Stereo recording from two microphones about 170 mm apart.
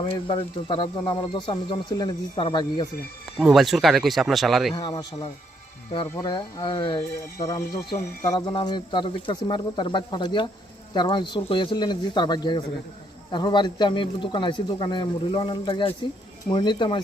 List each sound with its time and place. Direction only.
0.0 s speech: 30° left (ahead or behind)
3.3 s speech: centre (ahead or behind)
4.7 s speech: 25° left (ahead or behind)
7.3 s speech: 20° left (ahead or behind)